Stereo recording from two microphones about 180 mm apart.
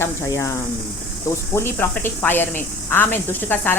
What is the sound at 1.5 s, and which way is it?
Speech, 15° left (ahead or behind).